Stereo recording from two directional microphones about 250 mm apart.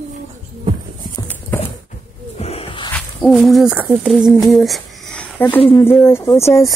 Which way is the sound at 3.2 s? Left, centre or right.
Centre.